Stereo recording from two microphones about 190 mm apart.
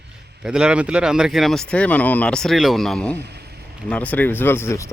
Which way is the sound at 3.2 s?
60° right (ahead or behind).